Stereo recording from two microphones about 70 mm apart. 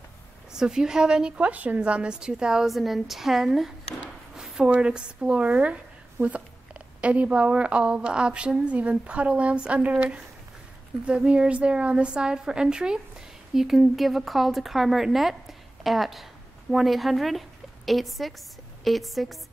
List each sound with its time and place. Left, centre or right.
0.5 s a woman's voice: centre
4.6 s a woman's voice: centre